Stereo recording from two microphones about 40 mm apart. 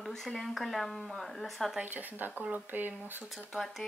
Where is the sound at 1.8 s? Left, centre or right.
Right.